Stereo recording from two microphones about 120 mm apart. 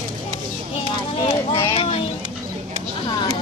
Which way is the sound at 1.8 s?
55° left (ahead or behind).